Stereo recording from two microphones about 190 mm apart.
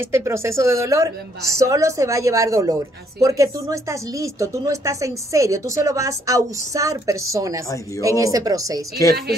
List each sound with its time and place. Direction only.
0.0 s a woman's voice: 15° right (ahead or behind)